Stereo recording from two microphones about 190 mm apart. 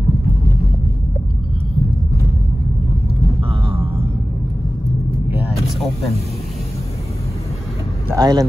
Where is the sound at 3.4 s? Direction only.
30° right (ahead or behind).